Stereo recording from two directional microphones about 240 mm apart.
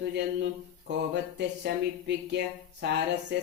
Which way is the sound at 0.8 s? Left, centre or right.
Right.